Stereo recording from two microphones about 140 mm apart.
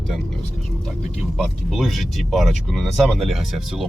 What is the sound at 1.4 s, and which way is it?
Speech, centre (ahead or behind).